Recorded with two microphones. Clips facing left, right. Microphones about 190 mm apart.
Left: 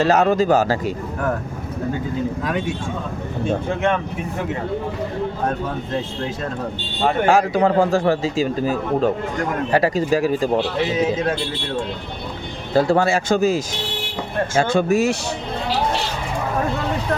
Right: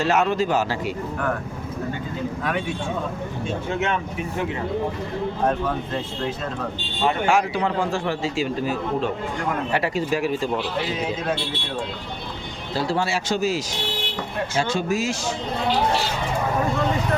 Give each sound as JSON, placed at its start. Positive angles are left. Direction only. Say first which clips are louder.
{"t": 0.0, "sound": "a man's voice", "louder": "left 5 dB", "side_deg": 40}
{"t": 3.4, "sound": "speech", "louder": "left 5 dB", "side_deg": 50}
{"t": 7.1, "sound": "a man's voice", "louder": "left 5 dB", "side_deg": 40}
{"t": 12.7, "sound": "speech", "louder": "left 7 dB", "side_deg": 50}